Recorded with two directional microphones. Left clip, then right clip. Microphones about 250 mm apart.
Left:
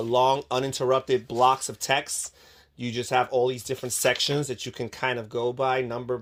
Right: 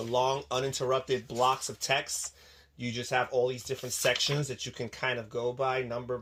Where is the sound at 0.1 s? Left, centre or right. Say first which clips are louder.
Left 7 dB; left.